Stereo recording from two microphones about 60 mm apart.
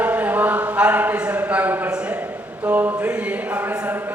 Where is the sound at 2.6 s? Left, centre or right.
Right.